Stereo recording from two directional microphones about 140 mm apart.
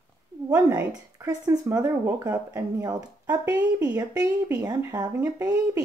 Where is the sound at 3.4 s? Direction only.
10° right (ahead or behind).